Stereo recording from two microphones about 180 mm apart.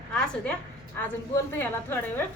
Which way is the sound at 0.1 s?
5° left (ahead or behind).